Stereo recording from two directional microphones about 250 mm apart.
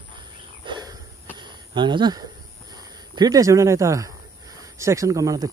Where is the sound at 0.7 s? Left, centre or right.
Centre.